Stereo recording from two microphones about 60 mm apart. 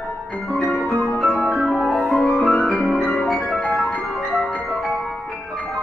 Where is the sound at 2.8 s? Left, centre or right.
Centre.